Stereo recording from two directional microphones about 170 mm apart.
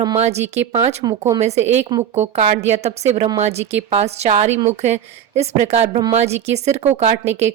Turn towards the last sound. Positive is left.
turn(degrees=-40)  # may be behind; listen again after turning